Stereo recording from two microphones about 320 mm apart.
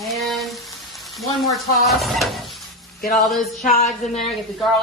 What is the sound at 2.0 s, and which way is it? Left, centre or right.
Speech, centre.